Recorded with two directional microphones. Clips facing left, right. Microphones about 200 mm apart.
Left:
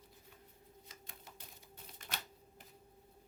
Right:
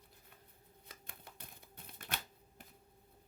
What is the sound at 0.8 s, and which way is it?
Typewriter, 55° right (ahead or behind).